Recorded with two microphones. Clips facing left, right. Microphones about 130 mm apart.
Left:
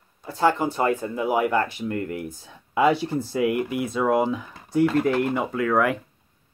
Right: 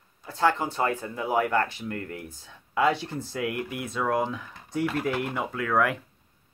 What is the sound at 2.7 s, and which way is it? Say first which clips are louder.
Speech: left 4 dB; 10° left (ahead or behind).